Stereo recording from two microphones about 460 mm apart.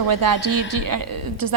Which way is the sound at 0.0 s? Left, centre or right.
Right.